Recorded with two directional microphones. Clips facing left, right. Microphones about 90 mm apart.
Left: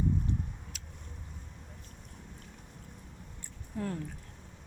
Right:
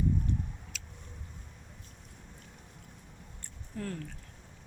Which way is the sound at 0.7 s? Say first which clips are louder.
Right 2 dB; 40° left (ahead or behind).